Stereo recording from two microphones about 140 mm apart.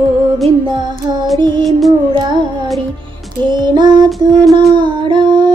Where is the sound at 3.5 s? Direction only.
30° right (ahead or behind).